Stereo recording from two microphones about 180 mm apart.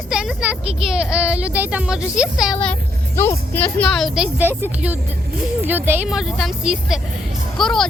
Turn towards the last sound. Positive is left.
turn(degrees=5)  # may be behind; listen again after turning